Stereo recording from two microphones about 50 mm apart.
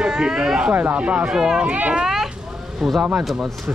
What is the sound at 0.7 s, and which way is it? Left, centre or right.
Speech, right.